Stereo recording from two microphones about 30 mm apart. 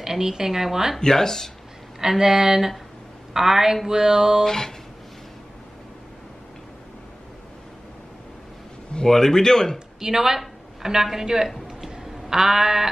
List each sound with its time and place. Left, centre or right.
0.0 s speech: centre
0.9 s speech: centre
2.0 s speech: centre
4.5 s a sound: centre
9.0 s speech: centre
9.9 s speech: centre
11.6 s a sound: centre
12.3 s speech: centre